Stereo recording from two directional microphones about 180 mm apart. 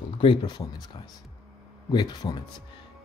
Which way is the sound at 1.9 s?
25° left (ahead or behind).